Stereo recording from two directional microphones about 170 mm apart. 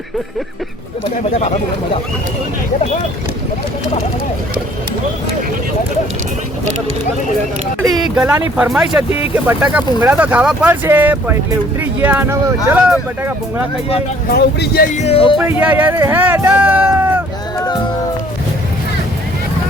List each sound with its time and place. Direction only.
8.0 s speech: 5° right (ahead or behind)
14.3 s speech: 65° left (ahead or behind)
14.9 s music: 35° left (ahead or behind)
15.4 s speech: 10° right (ahead or behind)